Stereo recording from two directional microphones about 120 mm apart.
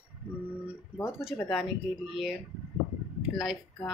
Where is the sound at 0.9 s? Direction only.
20° left (ahead or behind).